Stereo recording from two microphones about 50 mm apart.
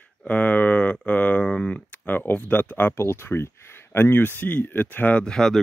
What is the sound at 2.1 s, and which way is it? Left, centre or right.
Speech, left.